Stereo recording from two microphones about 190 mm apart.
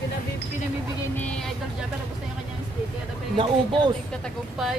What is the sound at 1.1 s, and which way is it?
Vehicle, 5° left (ahead or behind).